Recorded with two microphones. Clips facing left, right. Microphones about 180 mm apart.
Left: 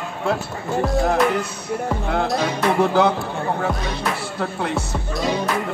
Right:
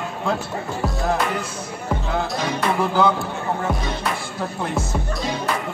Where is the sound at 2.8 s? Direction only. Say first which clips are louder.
Left 3 dB; 65° left (ahead or behind).